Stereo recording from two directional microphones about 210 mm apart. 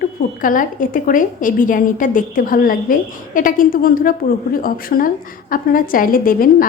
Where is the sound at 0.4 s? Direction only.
40° left (ahead or behind).